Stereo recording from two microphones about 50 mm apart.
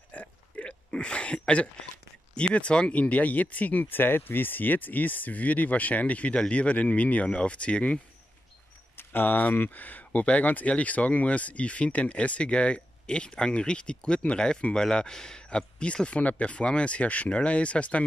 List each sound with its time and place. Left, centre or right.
0.1 s a sound: left
2.3 s speech: left
8.9 s speech: left